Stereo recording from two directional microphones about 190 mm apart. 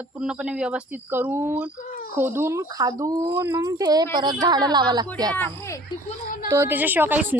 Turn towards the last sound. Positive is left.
turn(degrees=-10)  # may be behind; listen again after turning